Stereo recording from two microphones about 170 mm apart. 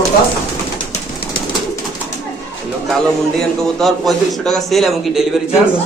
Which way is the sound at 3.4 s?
Centre (ahead or behind).